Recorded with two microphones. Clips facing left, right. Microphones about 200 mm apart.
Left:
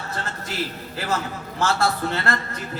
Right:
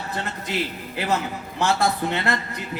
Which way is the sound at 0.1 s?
15° right (ahead or behind).